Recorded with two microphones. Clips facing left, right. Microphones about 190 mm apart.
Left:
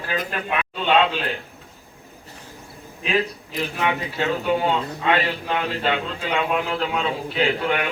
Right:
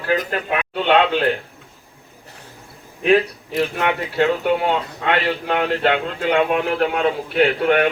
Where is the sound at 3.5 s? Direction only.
60° right (ahead or behind).